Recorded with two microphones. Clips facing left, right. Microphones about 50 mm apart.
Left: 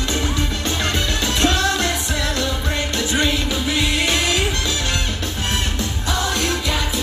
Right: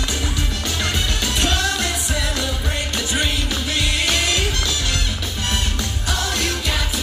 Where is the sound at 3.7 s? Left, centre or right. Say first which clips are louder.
Left 1 dB; centre.